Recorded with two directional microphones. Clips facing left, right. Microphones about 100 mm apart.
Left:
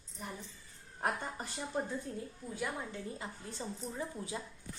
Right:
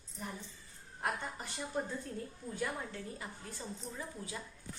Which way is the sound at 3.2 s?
25° left (ahead or behind).